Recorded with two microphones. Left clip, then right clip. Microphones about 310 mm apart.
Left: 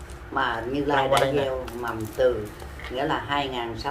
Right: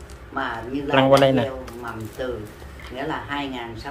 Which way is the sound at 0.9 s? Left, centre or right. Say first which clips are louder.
Right 6 dB; right.